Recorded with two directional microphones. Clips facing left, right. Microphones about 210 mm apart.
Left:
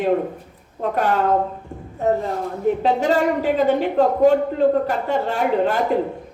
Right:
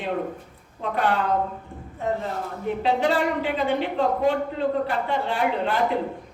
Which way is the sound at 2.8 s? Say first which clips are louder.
Left 1 dB; 45° left (ahead or behind).